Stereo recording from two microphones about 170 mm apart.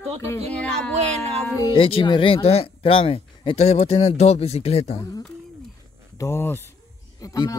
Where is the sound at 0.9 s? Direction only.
40° right (ahead or behind).